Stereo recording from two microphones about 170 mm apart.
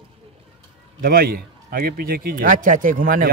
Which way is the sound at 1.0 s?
65° right (ahead or behind).